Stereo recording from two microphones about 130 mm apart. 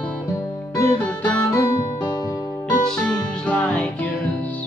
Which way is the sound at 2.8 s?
5° left (ahead or behind).